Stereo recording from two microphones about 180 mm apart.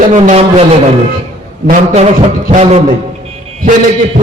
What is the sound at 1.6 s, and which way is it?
A man's voice, 45° right (ahead or behind).